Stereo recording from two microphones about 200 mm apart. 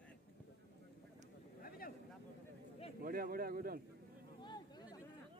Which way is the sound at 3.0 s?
45° right (ahead or behind).